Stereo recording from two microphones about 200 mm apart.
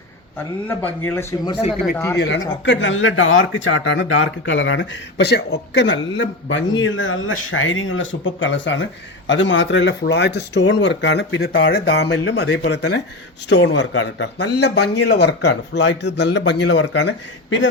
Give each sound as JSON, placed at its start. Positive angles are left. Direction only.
{"t": 0.7, "sound": "speech", "side_deg": 10}
{"t": 2.1, "sound": "speech", "side_deg": 65}